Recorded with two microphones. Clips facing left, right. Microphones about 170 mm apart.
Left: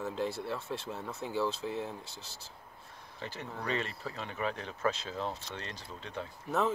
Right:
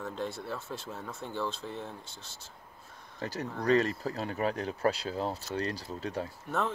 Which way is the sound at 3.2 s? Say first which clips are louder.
Right 7 dB; 40° right (ahead or behind).